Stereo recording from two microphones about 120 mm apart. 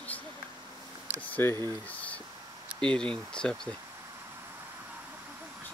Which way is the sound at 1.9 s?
10° left (ahead or behind).